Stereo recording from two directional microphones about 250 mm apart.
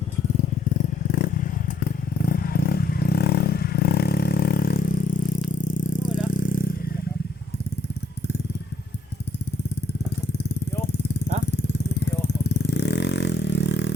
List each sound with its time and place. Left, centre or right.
1.1 s motorcycle: left
5.5 s vehicle: left
12.5 s vehicle: left